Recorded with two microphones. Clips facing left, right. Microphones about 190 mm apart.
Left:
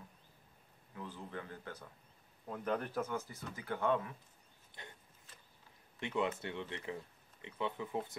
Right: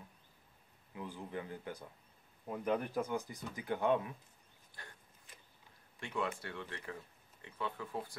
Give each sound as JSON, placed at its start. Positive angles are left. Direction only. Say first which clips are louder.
{"t": 0.9, "sound": "speech", "louder": "right 2 dB", "side_deg": -15}
{"t": 4.8, "sound": "a sound", "louder": "left 2 dB", "side_deg": 20}
{"t": 5.9, "sound": "speech", "louder": "left 3 dB", "side_deg": 20}